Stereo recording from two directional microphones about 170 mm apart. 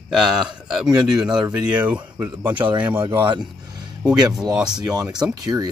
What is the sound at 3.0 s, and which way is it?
Speech, 25° right (ahead or behind).